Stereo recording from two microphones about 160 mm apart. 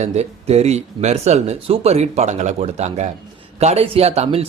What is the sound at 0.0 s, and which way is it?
Speech, 40° right (ahead or behind).